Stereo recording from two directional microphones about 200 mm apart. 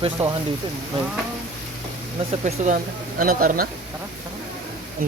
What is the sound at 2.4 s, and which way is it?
Speech, 35° right (ahead or behind).